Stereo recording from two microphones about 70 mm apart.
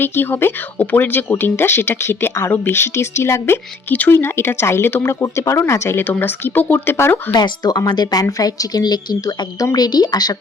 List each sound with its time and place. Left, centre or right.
0.0 s speech: left
5.2 s speech: left
7.3 s a woman's voice: left